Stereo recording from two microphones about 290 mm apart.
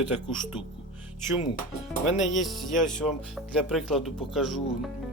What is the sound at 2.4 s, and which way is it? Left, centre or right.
Speech, centre.